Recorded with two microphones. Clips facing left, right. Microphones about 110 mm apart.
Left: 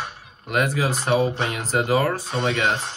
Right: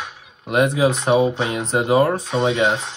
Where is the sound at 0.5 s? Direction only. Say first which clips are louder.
Right 5 dB; 30° right (ahead or behind).